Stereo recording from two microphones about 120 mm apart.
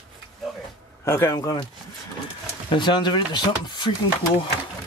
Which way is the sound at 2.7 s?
40° left (ahead or behind).